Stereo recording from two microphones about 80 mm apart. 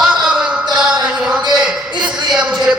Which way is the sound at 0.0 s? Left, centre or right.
Centre.